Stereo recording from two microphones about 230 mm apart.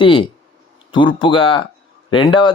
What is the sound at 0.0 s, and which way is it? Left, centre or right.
Speech, left.